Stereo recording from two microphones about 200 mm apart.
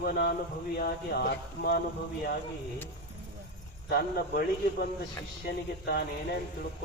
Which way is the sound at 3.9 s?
50° left (ahead or behind).